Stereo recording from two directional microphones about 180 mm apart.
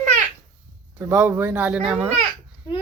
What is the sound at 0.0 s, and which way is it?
Babbling, 40° right (ahead or behind).